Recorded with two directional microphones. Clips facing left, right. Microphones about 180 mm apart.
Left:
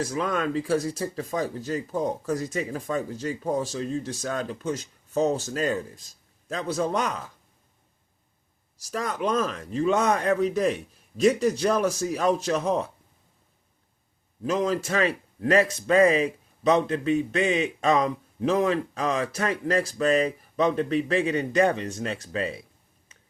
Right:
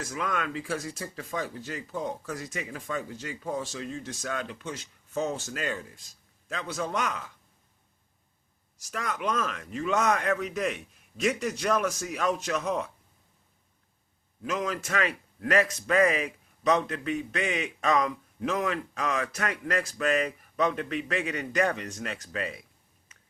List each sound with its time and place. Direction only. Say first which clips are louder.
0.0 s speech: left 6 dB; 30° left (ahead or behind)
8.8 s speech: left 5 dB; 35° left (ahead or behind)
14.4 s a man's voice: left 6 dB; 35° left (ahead or behind)
23.1 s a sound: left 3 dB; 30° left (ahead or behind)